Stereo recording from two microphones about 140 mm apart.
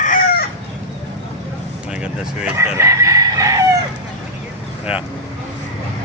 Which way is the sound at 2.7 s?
20° right (ahead or behind).